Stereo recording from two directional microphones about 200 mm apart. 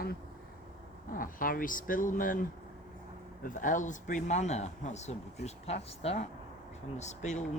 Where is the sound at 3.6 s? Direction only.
40° left (ahead or behind).